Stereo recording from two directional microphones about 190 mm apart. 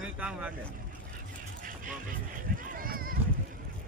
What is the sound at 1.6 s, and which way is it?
Run, 45° right (ahead or behind).